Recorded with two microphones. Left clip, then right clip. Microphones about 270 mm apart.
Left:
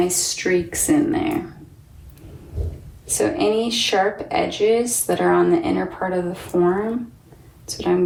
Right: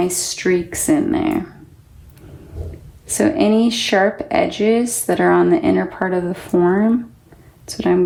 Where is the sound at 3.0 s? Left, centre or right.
Right.